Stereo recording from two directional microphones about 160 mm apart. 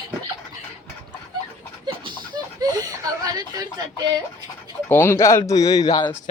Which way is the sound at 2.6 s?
25° right (ahead or behind).